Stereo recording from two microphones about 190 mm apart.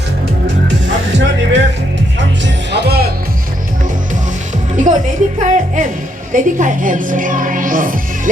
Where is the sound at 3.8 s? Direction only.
40° right (ahead or behind).